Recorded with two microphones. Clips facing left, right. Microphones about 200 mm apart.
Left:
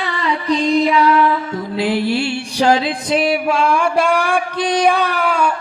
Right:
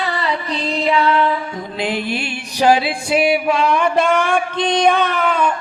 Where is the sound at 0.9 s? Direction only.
30° right (ahead or behind); by 3.5 s 5° right (ahead or behind).